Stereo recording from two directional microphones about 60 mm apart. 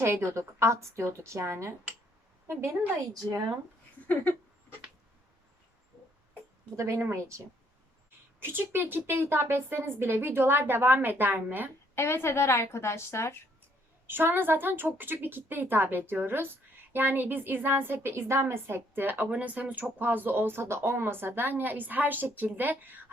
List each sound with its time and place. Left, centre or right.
0.0 s a woman's voice: right
3.0 s speech: right
4.0 s a sound: left
6.7 s a woman's voice: right
8.4 s speech: right
11.9 s a woman's voice: left
14.1 s speech: right